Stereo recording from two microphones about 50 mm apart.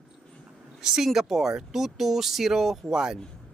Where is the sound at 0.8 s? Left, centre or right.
Centre.